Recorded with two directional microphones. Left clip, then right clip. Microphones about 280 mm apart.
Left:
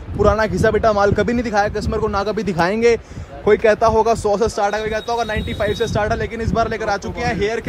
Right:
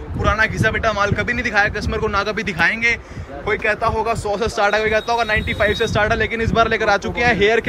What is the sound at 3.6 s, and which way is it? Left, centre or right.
A man's voice, centre.